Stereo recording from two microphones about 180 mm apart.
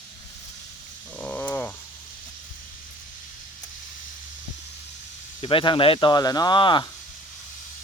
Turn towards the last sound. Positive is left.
turn(degrees=25)  # may be behind; listen again after turning